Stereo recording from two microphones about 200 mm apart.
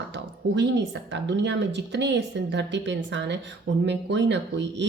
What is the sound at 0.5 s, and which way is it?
A woman's voice, 60° right (ahead or behind).